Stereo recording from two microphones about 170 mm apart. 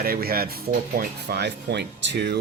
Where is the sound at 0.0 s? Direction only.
60° right (ahead or behind).